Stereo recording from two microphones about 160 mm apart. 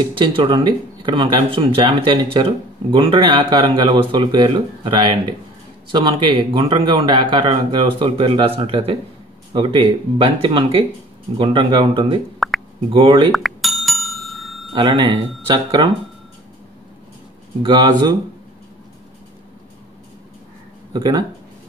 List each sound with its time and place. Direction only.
0.4 s speech: 30° right (ahead or behind)
12.4 s a sound: centre (ahead or behind)
12.9 s speech: 35° right (ahead or behind)
13.3 s bicycle bell: centre (ahead or behind)
14.7 s speech: 30° right (ahead or behind)
17.6 s speech: 25° right (ahead or behind)
20.9 s speech: 25° right (ahead or behind)